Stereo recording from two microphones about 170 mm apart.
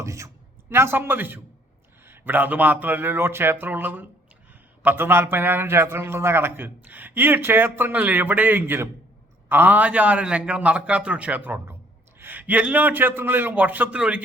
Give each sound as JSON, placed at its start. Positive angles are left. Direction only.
{"t": 0.0, "sound": "a man's voice", "side_deg": -15}